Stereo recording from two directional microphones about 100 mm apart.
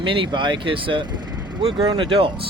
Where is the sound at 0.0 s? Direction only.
60° right (ahead or behind).